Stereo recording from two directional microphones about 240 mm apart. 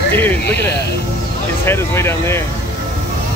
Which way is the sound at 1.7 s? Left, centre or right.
Centre.